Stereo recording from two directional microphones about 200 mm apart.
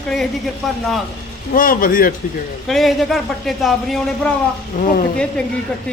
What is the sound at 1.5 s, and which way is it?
Speech, 45° left (ahead or behind).